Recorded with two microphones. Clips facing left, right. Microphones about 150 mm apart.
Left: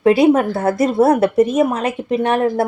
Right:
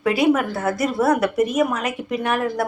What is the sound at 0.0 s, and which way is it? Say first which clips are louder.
Speech: left 6 dB; 25° left (ahead or behind).